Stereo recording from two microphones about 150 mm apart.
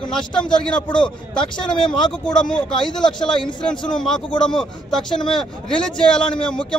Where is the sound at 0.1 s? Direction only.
5° left (ahead or behind).